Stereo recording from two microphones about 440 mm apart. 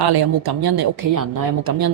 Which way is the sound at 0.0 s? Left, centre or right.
Right.